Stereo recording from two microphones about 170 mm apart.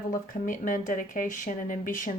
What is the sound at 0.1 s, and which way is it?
Speech, 50° left (ahead or behind).